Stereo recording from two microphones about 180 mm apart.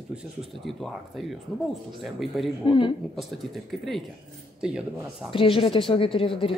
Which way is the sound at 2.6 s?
25° left (ahead or behind).